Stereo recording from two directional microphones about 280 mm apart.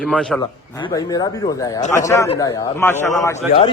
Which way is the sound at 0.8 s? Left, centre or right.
Centre.